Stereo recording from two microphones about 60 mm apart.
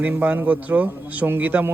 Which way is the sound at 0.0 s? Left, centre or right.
Right.